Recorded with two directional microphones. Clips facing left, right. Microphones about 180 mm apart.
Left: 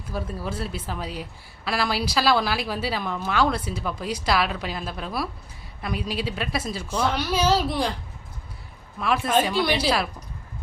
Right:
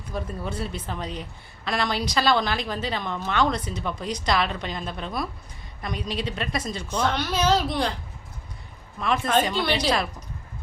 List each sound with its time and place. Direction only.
0.1 s a woman's voice: 5° left (ahead or behind)
9.0 s speech: 5° left (ahead or behind)